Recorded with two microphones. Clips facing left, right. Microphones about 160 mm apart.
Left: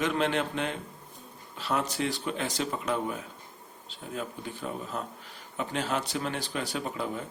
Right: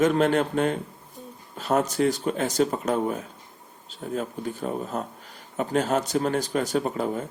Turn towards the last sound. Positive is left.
turn(degrees=-45)  # may be behind; listen again after turning